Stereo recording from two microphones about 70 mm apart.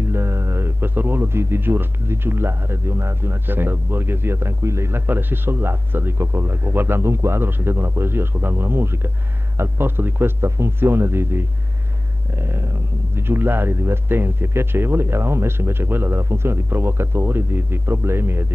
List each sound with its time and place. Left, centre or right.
0.1 s speech: right